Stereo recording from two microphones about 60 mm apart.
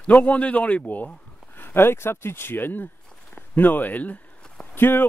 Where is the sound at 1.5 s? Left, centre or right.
Left.